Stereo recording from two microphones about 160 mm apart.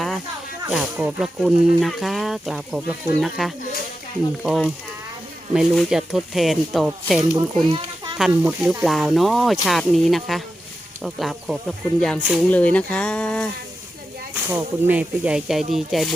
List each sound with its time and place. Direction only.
0.7 s speech: 5° right (ahead or behind)
7.3 s a child's voice: 25° right (ahead or behind)
8.2 s speech: 10° right (ahead or behind)
14.5 s speech: 10° right (ahead or behind)